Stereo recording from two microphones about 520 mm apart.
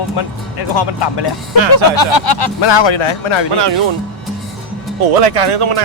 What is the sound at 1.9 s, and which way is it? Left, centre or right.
Speech, left.